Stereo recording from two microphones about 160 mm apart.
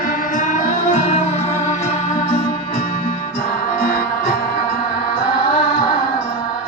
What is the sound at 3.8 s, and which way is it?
Music, 75° left (ahead or behind).